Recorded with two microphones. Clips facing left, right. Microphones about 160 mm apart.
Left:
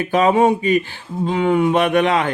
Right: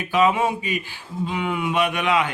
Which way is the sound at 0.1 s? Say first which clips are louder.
Left 5 dB; 45° left (ahead or behind).